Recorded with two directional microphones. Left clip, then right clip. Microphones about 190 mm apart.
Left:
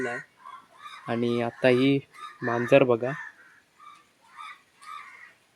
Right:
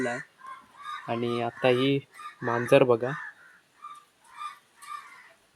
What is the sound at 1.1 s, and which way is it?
Speech, 15° left (ahead or behind).